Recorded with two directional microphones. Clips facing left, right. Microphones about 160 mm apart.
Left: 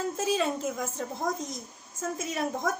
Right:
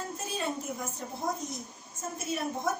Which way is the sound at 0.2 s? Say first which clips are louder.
Left 7 dB; 90° left.